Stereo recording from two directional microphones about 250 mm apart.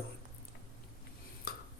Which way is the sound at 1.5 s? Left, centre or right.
Left.